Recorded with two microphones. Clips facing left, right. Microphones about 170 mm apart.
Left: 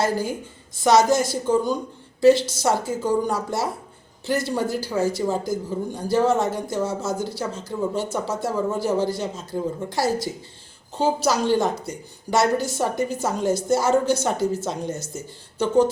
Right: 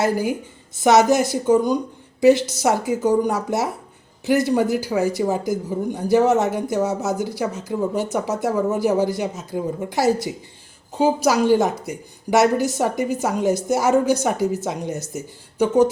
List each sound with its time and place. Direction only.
0.0 s speech: 15° right (ahead or behind)